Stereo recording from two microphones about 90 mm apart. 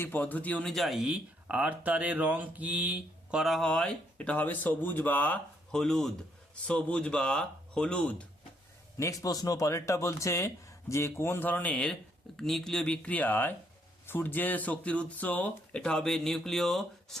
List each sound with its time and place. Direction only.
0.0 s speech: 20° left (ahead or behind)
0.6 s speech: centre (ahead or behind)
1.1 s speech: 15° right (ahead or behind)
3.4 s speech: centre (ahead or behind)
3.7 s speech: 10° left (ahead or behind)
5.7 s speech: 5° left (ahead or behind)
9.0 s speech: 40° left (ahead or behind); by 17.2 s 5° left (ahead or behind)